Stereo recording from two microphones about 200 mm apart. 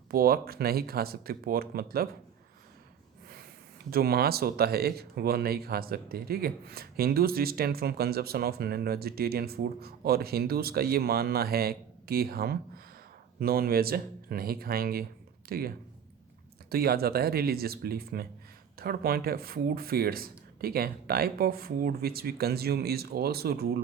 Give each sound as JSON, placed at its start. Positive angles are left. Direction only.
{"t": 0.1, "sound": "speech", "side_deg": -50}
{"t": 3.8, "sound": "speech", "side_deg": -50}